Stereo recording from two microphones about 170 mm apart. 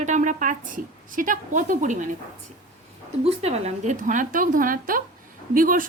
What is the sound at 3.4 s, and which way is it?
A woman's voice, 40° right (ahead or behind).